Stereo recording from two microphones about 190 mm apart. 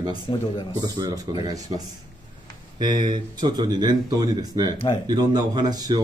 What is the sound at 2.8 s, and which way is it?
Speech, 25° right (ahead or behind).